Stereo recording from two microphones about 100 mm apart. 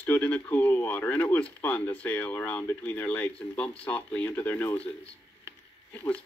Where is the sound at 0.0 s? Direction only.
15° left (ahead or behind).